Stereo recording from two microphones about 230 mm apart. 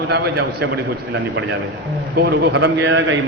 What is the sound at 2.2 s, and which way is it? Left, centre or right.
A man's voice, right.